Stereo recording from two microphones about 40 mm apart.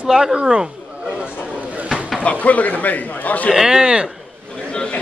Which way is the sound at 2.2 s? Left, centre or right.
Left.